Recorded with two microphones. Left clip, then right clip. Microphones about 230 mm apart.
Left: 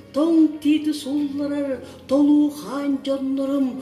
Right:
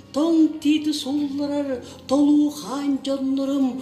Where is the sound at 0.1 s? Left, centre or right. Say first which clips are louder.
Left 1 dB; right.